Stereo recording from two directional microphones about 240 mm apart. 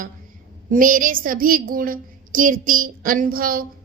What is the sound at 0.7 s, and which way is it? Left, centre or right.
A woman's voice, right.